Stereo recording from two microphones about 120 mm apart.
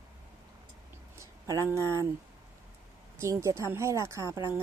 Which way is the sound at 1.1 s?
25° right (ahead or behind).